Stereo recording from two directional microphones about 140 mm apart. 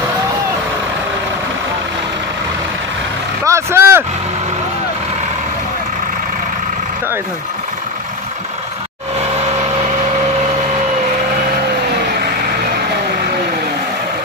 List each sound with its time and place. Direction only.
3.4 s vehicle: 20° right (ahead or behind)